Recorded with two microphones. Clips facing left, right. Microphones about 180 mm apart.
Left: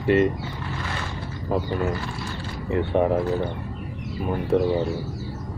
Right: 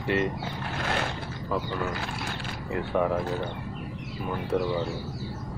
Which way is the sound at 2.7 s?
25° left (ahead or behind).